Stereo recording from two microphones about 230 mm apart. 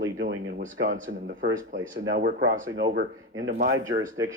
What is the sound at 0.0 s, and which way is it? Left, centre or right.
Speech, right.